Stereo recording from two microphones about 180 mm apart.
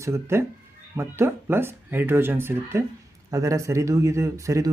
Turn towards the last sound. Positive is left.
turn(degrees=-15)  # may be behind; listen again after turning